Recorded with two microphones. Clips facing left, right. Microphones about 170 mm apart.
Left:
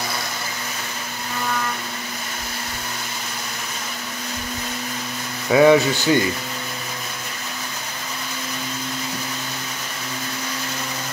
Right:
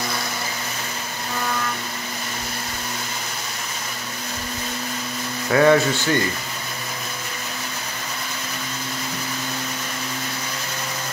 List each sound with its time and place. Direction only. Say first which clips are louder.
5.5 s speech: left 2 dB; 10° left (ahead or behind)